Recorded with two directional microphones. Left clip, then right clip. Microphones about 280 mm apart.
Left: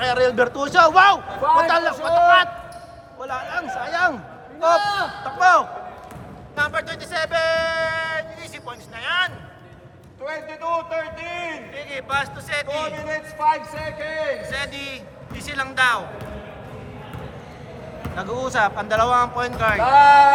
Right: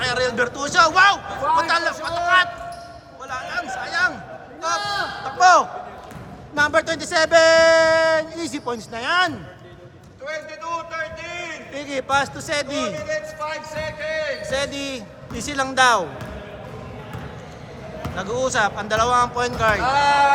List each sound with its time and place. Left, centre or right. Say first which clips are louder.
0.0 s a man's voice: left 3 dB; centre
4.8 s a man's voice: left 3 dB; left
5.2 s a man's voice: right 2 dB; centre
6.6 s speech: right 5 dB; right
10.2 s a man's voice: left 2 dB; centre
11.7 s a man's voice: right 5 dB; centre
13.1 s a man's voice: left 5 dB; centre
14.4 s a man's voice: right 3 dB; centre
18.2 s a man's voice: even; centre
19.8 s speech: left 9 dB; left